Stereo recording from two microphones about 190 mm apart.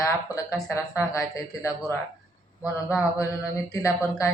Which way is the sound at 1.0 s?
20° left (ahead or behind).